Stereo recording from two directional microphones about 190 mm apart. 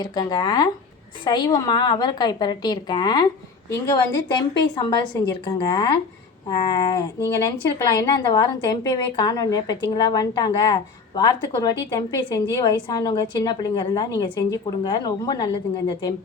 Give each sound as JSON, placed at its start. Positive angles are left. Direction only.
{"t": 0.0, "sound": "a woman's voice", "side_deg": 20}